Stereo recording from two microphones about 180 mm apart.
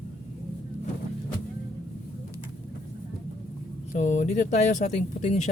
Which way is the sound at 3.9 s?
40° left (ahead or behind).